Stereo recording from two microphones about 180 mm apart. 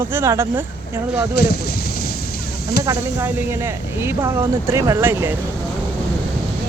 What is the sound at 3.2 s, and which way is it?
Speech, 10° right (ahead or behind).